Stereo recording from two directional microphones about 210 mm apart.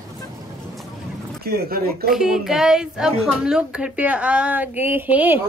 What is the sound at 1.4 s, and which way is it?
Speech, 45° right (ahead or behind).